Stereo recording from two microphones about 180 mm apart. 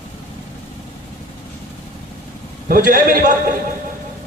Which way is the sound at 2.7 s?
50° right (ahead or behind).